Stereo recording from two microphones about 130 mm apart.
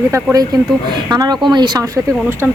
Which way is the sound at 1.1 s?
30° right (ahead or behind).